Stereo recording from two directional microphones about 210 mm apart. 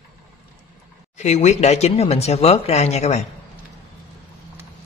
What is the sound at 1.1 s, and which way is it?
Speech, 35° left (ahead or behind).